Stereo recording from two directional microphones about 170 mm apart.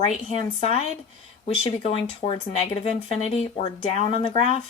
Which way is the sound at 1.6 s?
35° left (ahead or behind).